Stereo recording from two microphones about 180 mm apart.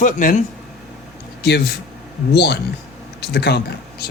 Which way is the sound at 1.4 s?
65° left (ahead or behind).